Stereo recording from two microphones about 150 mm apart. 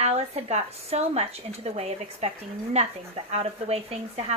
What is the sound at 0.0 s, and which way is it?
Speech, 45° right (ahead or behind).